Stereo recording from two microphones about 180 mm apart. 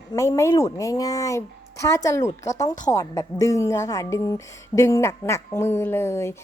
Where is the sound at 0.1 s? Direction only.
20° left (ahead or behind).